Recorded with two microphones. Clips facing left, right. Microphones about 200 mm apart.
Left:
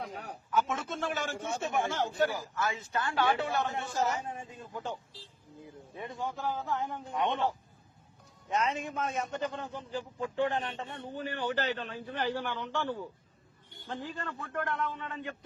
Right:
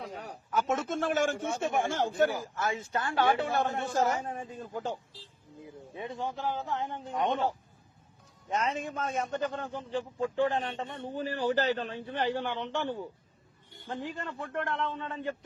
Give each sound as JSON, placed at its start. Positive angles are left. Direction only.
{"t": 0.1, "sound": "a man's voice", "side_deg": -45}
{"t": 2.9, "sound": "a man's voice", "side_deg": -25}
{"t": 3.4, "sound": "a man's voice", "side_deg": -50}
{"t": 5.6, "sound": "a man's voice", "side_deg": -25}
{"t": 7.1, "sound": "a man's voice", "side_deg": -40}